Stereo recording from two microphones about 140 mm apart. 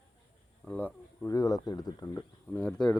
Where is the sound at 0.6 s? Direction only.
10° left (ahead or behind).